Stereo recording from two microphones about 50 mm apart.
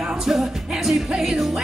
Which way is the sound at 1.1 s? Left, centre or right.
Centre.